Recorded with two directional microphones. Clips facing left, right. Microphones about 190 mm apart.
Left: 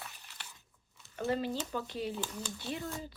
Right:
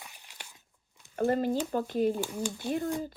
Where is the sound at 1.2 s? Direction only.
50° right (ahead or behind).